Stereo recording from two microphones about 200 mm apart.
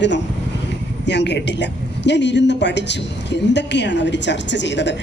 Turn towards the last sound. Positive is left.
turn(degrees=60)  # may be behind; listen again after turning